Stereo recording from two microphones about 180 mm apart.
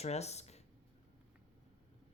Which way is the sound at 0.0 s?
35° left (ahead or behind).